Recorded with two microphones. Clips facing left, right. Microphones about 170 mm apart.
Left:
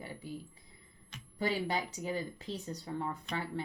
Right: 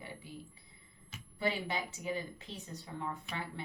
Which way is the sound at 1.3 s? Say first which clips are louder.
Left 2 dB; 40° left (ahead or behind).